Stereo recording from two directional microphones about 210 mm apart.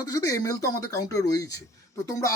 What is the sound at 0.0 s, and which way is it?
Speech, 15° left (ahead or behind).